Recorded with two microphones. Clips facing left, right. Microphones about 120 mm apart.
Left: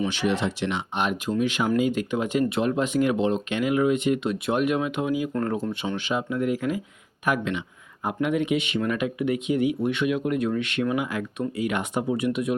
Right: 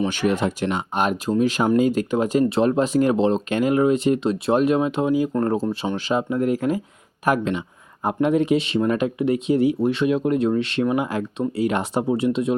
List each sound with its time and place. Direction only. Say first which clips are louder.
0.1 s speech: right 4 dB; 45° right (ahead or behind); by 12.5 s 30° right (ahead or behind)